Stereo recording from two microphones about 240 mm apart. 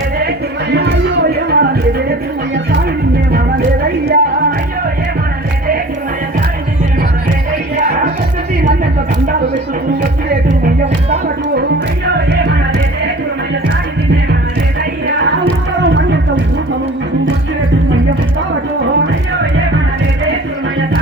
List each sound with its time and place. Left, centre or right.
0.7 s music: right
3.3 s music: right
15.8 s music: right